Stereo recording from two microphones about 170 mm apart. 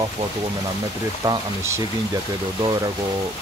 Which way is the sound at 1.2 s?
25° right (ahead or behind).